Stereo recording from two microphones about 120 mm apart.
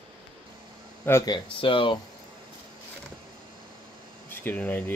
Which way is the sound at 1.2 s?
40° left (ahead or behind).